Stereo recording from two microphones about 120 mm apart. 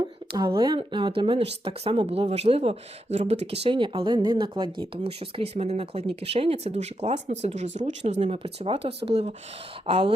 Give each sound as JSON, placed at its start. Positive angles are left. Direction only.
{"t": 0.0, "sound": "a sound", "side_deg": -35}
{"t": 0.8, "sound": "speech", "side_deg": -45}
{"t": 1.4, "sound": "speech", "side_deg": -55}
{"t": 5.0, "sound": "speech", "side_deg": -60}
{"t": 8.2, "sound": "speech", "side_deg": -55}
{"t": 9.8, "sound": "speech", "side_deg": -50}